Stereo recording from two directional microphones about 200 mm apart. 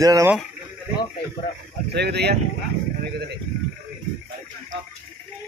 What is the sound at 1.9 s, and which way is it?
Speech, 55° right (ahead or behind).